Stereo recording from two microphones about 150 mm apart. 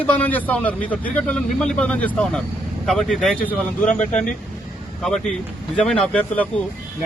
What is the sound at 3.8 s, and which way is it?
Speech, 55° left (ahead or behind).